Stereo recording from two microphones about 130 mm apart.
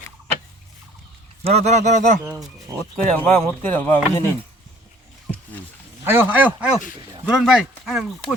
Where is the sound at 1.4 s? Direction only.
55° right (ahead or behind).